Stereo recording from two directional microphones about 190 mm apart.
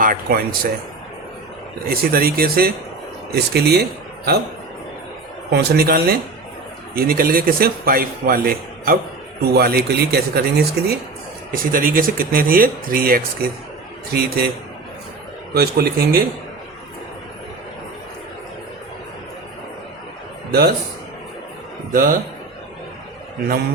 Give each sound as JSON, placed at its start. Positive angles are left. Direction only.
{"t": 0.0, "sound": "a man's voice", "side_deg": -50}
{"t": 1.9, "sound": "a man's voice", "side_deg": -50}
{"t": 5.5, "sound": "a man's voice", "side_deg": -60}
{"t": 15.5, "sound": "a man's voice", "side_deg": -55}
{"t": 21.9, "sound": "a man's voice", "side_deg": -45}